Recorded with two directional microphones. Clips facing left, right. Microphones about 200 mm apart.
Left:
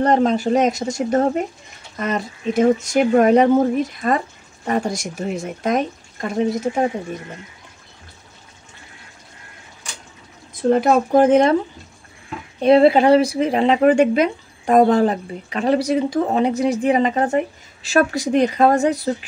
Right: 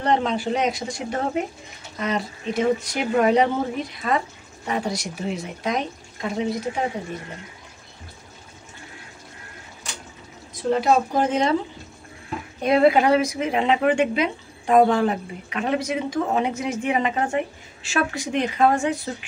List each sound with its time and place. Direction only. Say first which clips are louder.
0.0 s speech: left 6 dB; 45° left (ahead or behind)
10.5 s speech: left 4 dB; 55° left (ahead or behind)
12.6 s speech: left 5 dB; 30° left (ahead or behind)